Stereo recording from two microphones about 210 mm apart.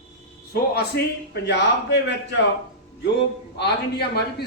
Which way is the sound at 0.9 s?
55° left (ahead or behind).